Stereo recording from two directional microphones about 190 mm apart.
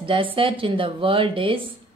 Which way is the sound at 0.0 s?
30° right (ahead or behind).